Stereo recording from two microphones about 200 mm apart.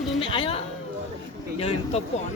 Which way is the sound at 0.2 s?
25° left (ahead or behind).